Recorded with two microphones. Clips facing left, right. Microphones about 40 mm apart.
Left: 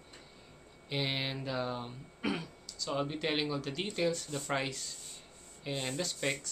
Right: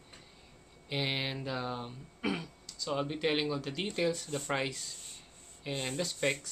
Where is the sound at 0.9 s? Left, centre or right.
Centre.